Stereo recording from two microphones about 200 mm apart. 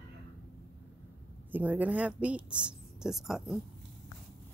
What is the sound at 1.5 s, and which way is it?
Speech, 10° right (ahead or behind).